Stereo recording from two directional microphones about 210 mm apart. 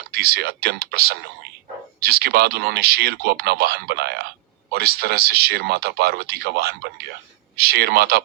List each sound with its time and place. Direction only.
0.1 s speech: 50° right (ahead or behind)